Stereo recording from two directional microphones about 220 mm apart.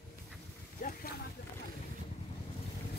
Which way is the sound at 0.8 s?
40° left (ahead or behind).